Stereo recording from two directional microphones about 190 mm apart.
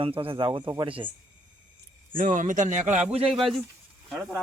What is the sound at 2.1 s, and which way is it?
Speech, 45° right (ahead or behind).